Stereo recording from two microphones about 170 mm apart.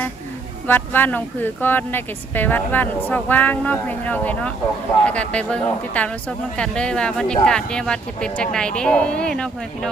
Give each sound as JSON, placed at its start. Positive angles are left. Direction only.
{"t": 0.7, "sound": "speech", "side_deg": 10}